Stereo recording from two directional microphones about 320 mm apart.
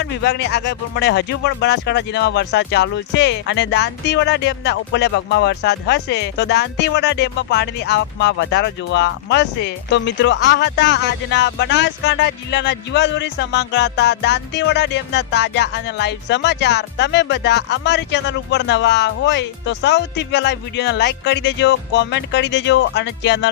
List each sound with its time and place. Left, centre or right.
0.0 s speech: left